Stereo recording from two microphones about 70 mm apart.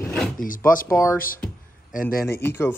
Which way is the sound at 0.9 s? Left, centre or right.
Left.